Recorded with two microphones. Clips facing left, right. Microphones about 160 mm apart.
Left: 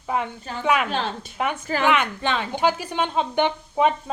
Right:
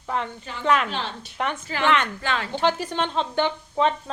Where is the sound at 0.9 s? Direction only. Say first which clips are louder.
Left 4 dB; 50° left (ahead or behind).